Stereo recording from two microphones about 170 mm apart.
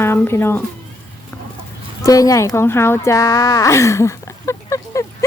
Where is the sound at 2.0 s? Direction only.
20° left (ahead or behind).